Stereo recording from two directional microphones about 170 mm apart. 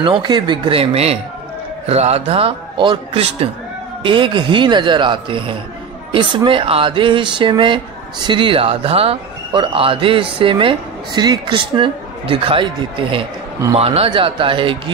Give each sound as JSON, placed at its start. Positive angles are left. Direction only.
{"t": 0.0, "sound": "a man's voice", "side_deg": -25}